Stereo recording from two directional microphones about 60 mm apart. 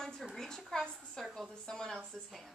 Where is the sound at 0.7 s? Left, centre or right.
Centre.